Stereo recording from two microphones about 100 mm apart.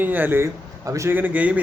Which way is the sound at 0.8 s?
35° right (ahead or behind).